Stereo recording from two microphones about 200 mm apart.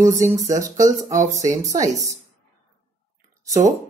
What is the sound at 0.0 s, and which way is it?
Speech, 15° right (ahead or behind).